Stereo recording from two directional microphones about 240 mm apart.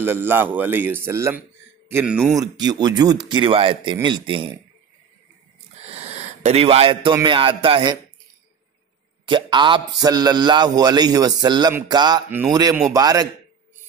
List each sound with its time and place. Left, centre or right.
0.0 s a man's voice: centre
6.0 s speech: right
9.3 s a man's voice: centre